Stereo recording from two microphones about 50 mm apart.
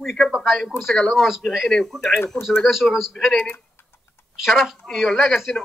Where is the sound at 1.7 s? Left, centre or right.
Centre.